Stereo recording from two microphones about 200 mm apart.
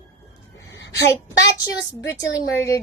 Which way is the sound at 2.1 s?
15° left (ahead or behind).